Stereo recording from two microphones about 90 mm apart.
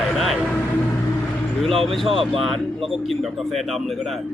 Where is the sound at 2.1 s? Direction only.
85° right.